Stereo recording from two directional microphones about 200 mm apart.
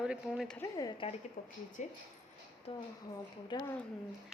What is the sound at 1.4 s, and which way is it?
A woman's voice, 45° left (ahead or behind).